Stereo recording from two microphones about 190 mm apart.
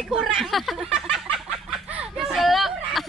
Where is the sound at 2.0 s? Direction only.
Centre (ahead or behind).